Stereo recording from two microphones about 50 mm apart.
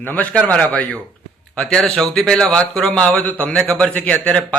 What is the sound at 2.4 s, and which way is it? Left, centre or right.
Speech, left.